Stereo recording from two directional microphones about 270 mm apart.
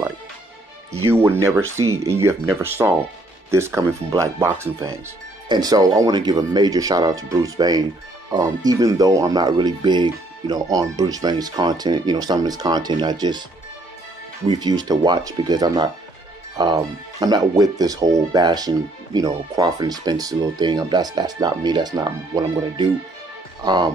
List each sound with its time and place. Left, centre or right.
1.1 s speech: centre
14.5 s speech: centre